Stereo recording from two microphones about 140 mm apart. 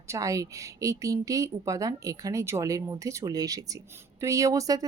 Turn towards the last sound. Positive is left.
turn(degrees=-25)  # may be behind; listen again after turning